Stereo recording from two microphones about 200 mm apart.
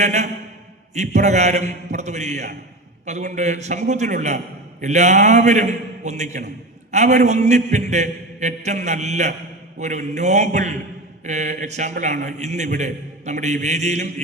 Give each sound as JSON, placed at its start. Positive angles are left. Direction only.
{"t": 0.0, "sound": "a man's voice", "side_deg": -35}